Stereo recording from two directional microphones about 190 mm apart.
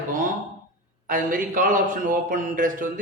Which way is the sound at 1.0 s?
45° right (ahead or behind).